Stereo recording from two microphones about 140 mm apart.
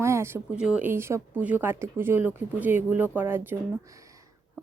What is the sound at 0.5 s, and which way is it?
Speech, 5° right (ahead or behind).